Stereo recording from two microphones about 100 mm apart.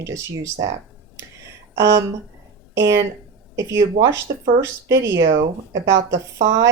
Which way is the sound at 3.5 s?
30° right (ahead or behind).